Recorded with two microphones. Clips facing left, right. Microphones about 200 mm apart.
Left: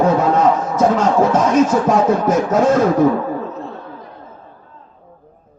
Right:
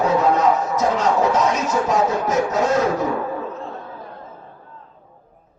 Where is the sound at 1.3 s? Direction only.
50° left (ahead or behind).